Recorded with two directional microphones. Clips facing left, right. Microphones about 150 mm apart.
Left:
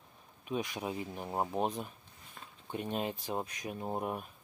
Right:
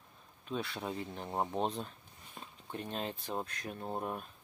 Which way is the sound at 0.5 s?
15° left (ahead or behind).